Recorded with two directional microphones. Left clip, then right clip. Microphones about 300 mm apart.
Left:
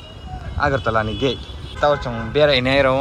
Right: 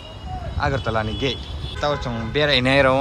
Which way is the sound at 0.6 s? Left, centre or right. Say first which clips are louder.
Left 4 dB; centre.